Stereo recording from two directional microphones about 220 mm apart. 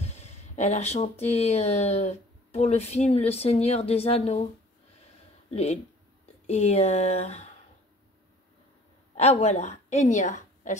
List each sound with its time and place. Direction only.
0.0 s speech: 30° left (ahead or behind)
5.5 s speech: 30° left (ahead or behind)
9.1 s a woman's voice: 30° left (ahead or behind)